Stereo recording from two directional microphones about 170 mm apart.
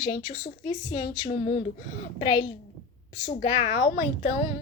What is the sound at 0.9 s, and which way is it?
Speech, 25° left (ahead or behind).